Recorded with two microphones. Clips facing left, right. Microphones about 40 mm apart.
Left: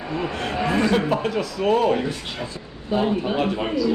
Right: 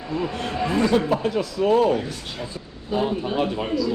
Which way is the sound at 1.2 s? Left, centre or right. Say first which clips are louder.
Right 1 dB; left.